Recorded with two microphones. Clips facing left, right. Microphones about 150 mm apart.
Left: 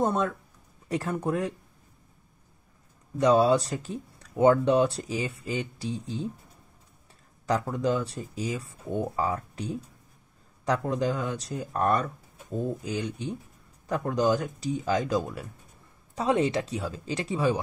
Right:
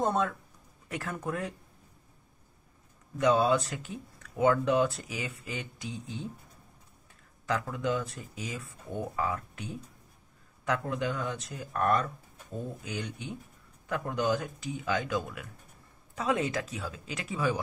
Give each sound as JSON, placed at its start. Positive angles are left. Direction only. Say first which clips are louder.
{"t": 0.8, "sound": "speech", "louder": "left 7 dB", "side_deg": 30}
{"t": 3.2, "sound": "speech", "louder": "left 4 dB", "side_deg": 35}
{"t": 7.4, "sound": "speech", "louder": "left 5 dB", "side_deg": 35}
{"t": 11.9, "sound": "speech", "louder": "left 2 dB", "side_deg": 10}
{"t": 12.8, "sound": "speech", "louder": "left 6 dB", "side_deg": 35}